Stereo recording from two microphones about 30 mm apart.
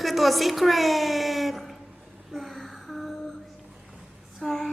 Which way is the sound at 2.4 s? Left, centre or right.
Centre.